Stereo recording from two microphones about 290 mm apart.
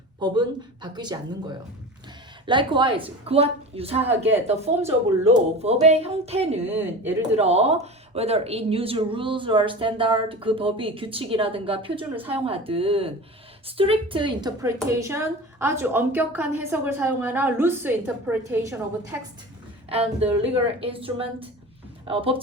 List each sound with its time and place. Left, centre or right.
0.2 s a woman's voice: centre
6.7 s a woman's voice: centre
7.3 s a woman's voice: right
19.9 s a woman's voice: right